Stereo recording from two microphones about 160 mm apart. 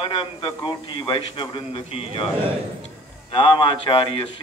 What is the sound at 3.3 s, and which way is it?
A man's voice, 30° left (ahead or behind).